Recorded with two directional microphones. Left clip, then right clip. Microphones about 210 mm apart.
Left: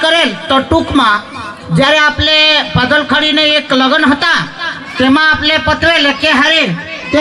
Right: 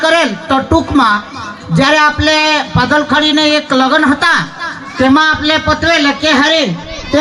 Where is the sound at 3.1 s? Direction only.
60° left (ahead or behind).